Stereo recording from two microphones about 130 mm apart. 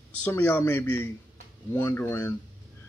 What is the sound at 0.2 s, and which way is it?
A man's voice, 15° left (ahead or behind).